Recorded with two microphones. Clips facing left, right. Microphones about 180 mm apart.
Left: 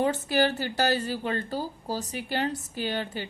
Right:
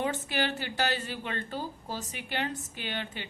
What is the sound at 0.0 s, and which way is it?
A woman's voice, 40° left (ahead or behind).